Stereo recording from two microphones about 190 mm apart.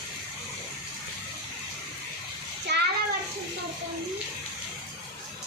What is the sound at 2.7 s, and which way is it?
Child singing, 65° right (ahead or behind).